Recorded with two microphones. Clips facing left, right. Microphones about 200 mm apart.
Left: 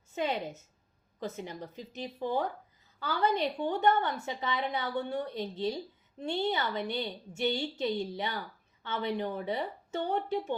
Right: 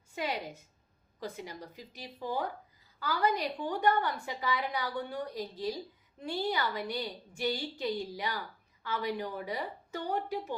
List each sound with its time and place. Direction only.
0.1 s a woman's voice: 25° left (ahead or behind)